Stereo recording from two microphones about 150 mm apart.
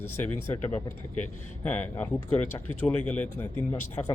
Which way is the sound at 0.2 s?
10° left (ahead or behind).